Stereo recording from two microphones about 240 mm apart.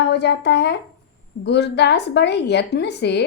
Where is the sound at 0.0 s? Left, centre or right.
Left.